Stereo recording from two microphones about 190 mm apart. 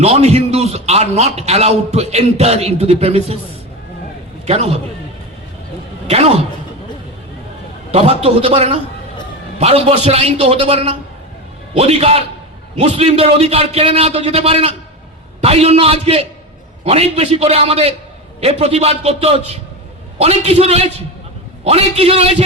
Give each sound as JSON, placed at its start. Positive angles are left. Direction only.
{"t": 0.0, "sound": "a man's voice", "side_deg": -35}
{"t": 4.4, "sound": "a man's voice", "side_deg": -30}
{"t": 6.1, "sound": "speech", "side_deg": -35}
{"t": 7.9, "sound": "a man's voice", "side_deg": -35}